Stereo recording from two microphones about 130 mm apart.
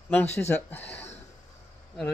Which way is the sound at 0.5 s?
15° left (ahead or behind).